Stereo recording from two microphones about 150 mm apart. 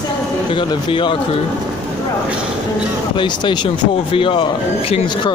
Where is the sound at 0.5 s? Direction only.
35° left (ahead or behind).